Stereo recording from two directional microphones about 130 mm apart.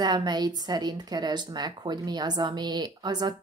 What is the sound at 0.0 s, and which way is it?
Speech, 35° right (ahead or behind).